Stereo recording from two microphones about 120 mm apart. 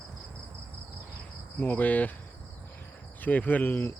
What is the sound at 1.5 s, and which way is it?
Cricket, 15° left (ahead or behind).